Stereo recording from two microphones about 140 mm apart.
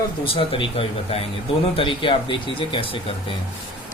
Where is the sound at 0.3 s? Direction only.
40° left (ahead or behind).